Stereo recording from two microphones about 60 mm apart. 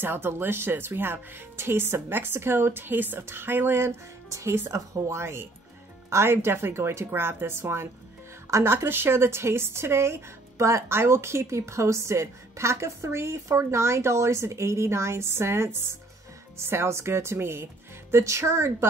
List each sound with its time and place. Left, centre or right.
0.0 s speech: right
4.7 s speech: right